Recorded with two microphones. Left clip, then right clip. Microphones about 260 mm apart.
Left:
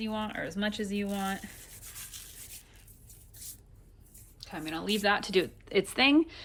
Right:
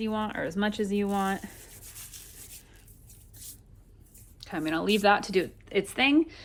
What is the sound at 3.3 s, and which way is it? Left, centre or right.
Vehicle, centre.